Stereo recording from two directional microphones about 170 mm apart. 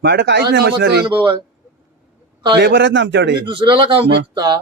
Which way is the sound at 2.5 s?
85° right.